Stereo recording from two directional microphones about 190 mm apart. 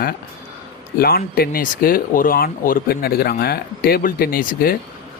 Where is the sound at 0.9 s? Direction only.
50° left (ahead or behind).